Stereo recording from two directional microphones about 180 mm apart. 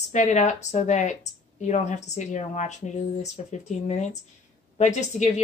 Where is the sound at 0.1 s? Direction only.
40° left (ahead or behind).